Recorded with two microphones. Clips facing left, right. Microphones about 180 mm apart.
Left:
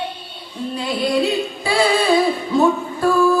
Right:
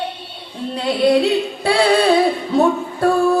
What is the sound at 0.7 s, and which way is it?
Singing, 65° right (ahead or behind).